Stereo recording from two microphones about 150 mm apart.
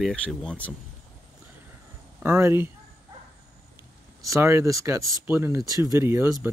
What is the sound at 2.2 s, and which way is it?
Speech, 15° right (ahead or behind).